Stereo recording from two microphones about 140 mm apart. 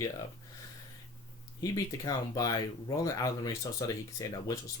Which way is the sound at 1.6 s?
25° left (ahead or behind).